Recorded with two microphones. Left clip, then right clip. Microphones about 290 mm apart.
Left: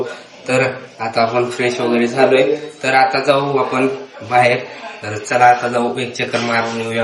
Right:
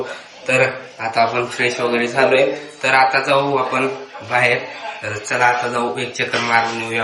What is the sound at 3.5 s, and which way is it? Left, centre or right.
Speech, centre.